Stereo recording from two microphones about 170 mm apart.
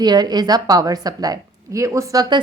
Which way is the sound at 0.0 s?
25° right (ahead or behind).